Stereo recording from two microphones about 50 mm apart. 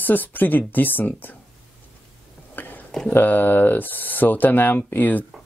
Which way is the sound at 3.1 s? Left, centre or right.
Left.